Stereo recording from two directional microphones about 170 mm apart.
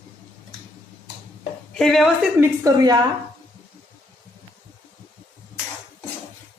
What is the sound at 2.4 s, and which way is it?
Speech, 20° right (ahead or behind).